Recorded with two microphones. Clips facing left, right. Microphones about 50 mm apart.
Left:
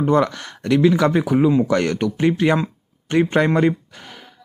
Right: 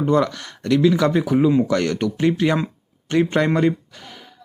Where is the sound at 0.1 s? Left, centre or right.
Left.